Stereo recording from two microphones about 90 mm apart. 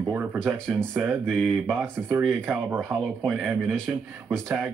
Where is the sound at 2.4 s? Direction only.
15° right (ahead or behind).